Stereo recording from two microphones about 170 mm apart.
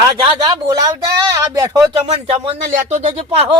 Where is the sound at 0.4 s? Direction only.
20° right (ahead or behind).